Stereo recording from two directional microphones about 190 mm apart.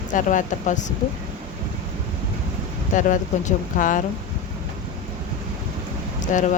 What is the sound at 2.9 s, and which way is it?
Speech, 40° left (ahead or behind).